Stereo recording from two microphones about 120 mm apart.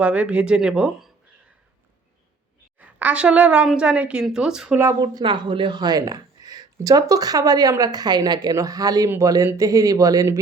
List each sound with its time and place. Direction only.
0.0 s a woman's voice: 10° right (ahead or behind)
2.7 s a woman's voice: 10° right (ahead or behind)
4.8 s speech: 30° right (ahead or behind)
5.2 s speech: 45° right (ahead or behind)